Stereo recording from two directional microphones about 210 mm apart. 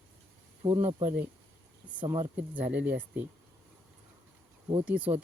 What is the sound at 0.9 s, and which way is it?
Speech, 30° right (ahead or behind).